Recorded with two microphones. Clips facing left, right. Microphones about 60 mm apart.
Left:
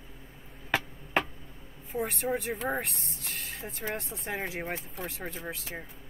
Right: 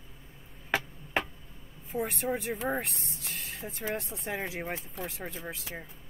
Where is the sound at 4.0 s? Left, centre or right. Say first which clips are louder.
Even; centre.